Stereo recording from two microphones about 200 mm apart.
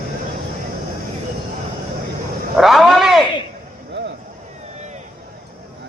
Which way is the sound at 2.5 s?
Centre (ahead or behind).